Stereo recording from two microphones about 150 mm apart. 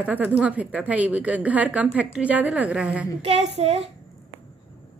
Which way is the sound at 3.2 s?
40° right (ahead or behind).